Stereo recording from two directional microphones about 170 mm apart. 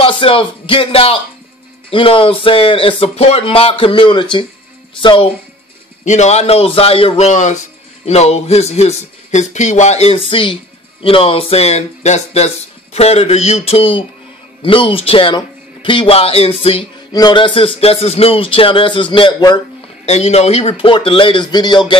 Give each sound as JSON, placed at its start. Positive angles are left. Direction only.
{"t": 0.0, "sound": "a man's voice", "side_deg": 30}
{"t": 6.0, "sound": "a man's voice", "side_deg": 45}
{"t": 17.1, "sound": "a man's voice", "side_deg": 25}
{"t": 20.1, "sound": "a man's voice", "side_deg": 40}